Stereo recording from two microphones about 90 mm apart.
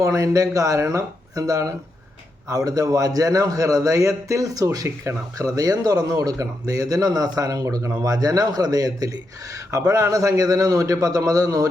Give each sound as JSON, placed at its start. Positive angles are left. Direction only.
{"t": 0.0, "sound": "a man's voice", "side_deg": -40}